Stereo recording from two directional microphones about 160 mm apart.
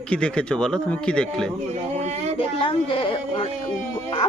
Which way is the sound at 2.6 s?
35° left (ahead or behind).